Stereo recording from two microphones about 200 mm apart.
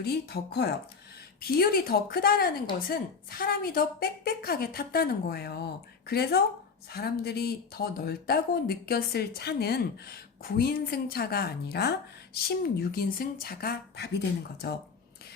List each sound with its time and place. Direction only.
0.0 s speech: 55° left (ahead or behind)